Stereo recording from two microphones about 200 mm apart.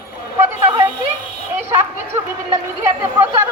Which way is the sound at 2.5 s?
10° right (ahead or behind).